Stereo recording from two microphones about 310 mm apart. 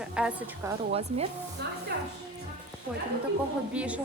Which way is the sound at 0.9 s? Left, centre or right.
Centre.